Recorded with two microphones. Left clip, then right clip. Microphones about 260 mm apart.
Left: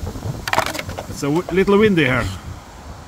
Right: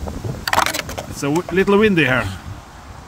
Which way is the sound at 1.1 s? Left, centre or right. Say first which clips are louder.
Even; centre.